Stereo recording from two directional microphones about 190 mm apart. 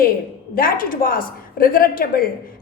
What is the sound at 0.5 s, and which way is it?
A woman's voice, 50° left (ahead or behind).